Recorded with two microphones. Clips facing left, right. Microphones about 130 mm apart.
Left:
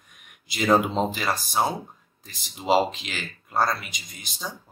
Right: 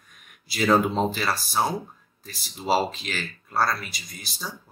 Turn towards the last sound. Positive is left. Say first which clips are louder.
# left 1 dB
turn(degrees=20)  # may be behind; listen again after turning